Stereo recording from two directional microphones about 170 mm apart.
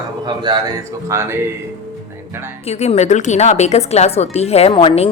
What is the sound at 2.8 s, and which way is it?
Speech, 40° left (ahead or behind).